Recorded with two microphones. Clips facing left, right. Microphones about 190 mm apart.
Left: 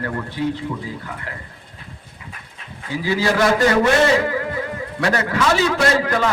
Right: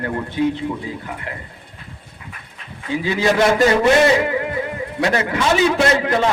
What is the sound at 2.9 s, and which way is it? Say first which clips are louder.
Speech: right 2 dB; 20° right (ahead or behind).